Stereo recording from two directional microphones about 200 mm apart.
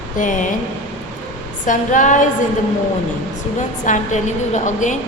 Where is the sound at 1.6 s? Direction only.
40° left (ahead or behind).